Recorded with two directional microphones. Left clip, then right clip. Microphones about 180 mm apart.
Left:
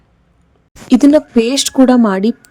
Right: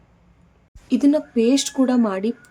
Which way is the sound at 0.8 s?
50° left (ahead or behind).